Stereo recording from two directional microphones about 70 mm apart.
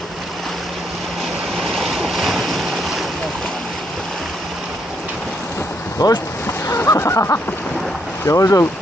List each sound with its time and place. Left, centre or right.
1.5 s waves: centre
6.0 s speech: left
6.7 s a sound: left
8.2 s speech: left